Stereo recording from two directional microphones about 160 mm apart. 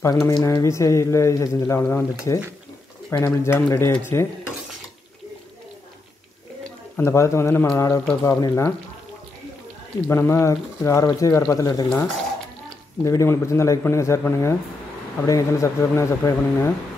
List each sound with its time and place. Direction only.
0.0 s a man's voice: 25° left (ahead or behind)
7.0 s a man's voice: 15° left (ahead or behind)
10.0 s a man's voice: 15° left (ahead or behind)
13.0 s a man's voice: 20° left (ahead or behind)